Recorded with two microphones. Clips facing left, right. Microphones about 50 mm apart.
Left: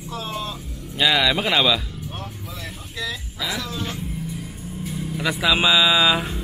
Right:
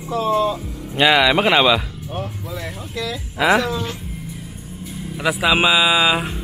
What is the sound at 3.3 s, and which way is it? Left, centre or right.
Speech, right.